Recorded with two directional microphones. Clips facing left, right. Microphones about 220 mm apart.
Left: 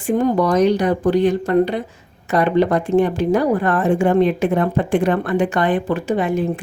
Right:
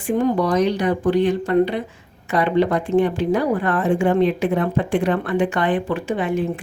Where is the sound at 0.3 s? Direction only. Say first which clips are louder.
Left 3 dB; 45° left (ahead or behind).